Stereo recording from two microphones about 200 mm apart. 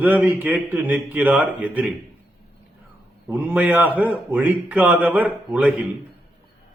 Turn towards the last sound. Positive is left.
turn(degrees=-5)  # may be behind; listen again after turning